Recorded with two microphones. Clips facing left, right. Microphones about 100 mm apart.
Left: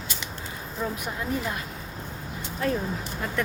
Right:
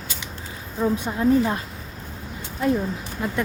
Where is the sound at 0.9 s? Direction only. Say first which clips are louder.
Right 11 dB; 30° right (ahead or behind).